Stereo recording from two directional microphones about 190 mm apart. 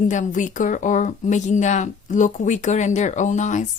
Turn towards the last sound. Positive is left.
turn(degrees=40)  # may be behind; listen again after turning